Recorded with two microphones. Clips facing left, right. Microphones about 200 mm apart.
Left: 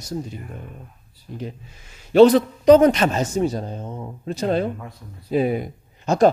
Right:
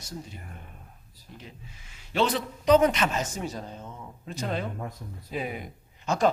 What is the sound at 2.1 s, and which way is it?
A man's voice, 40° left (ahead or behind).